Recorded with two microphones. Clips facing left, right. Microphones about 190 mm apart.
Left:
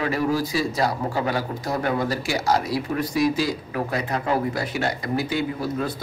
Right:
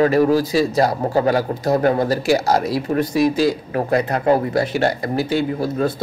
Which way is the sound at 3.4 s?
60° right (ahead or behind).